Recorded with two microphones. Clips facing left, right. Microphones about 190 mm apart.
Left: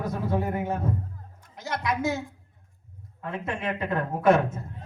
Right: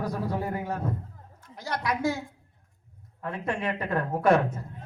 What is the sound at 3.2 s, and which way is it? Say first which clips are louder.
A man's voice: right 1 dB; 25° left (ahead or behind).